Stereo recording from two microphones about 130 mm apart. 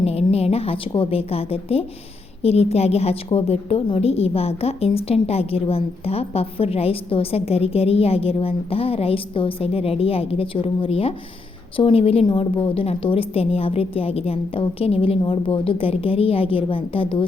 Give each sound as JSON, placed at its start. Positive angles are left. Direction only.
{"t": 0.0, "sound": "a woman's voice", "side_deg": 50}